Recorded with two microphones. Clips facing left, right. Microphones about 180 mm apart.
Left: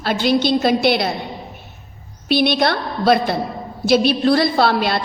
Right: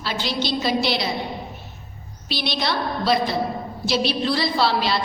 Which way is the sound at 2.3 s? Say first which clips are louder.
Left 9 dB; 55° left (ahead or behind).